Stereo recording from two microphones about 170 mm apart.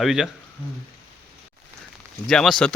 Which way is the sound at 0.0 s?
Centre (ahead or behind).